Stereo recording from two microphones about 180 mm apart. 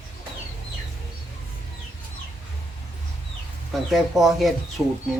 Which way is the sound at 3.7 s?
Centre (ahead or behind).